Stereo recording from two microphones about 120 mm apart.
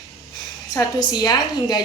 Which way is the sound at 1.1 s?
35° left (ahead or behind).